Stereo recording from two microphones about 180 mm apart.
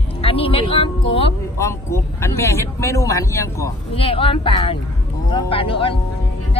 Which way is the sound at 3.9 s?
30° left (ahead or behind).